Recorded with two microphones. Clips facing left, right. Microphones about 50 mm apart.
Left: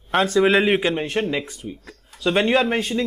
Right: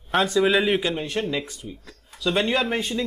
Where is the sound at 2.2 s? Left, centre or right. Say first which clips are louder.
Left 4 dB; left.